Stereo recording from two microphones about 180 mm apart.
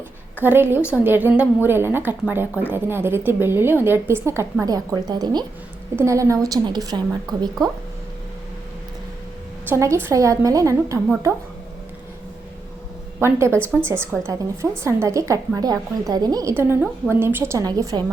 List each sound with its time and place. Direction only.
0.4 s a woman's voice: 10° right (ahead or behind)
9.6 s a woman's voice: 15° right (ahead or behind)
13.2 s a woman's voice: 15° right (ahead or behind)